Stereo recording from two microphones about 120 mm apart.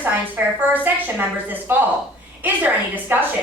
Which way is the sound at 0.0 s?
15° right (ahead or behind).